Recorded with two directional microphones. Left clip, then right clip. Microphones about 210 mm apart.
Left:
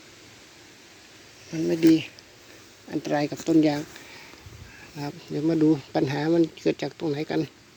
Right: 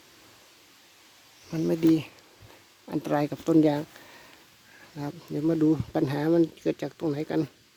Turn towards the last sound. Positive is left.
turn(degrees=-20)  # may be behind; listen again after turning